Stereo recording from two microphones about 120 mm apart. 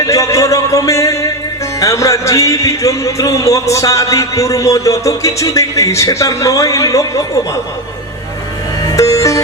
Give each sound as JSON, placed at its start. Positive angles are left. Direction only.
{"t": 0.0, "sound": "a sound", "side_deg": 25}
{"t": 1.8, "sound": "speech", "side_deg": 25}
{"t": 8.9, "sound": "music", "side_deg": 25}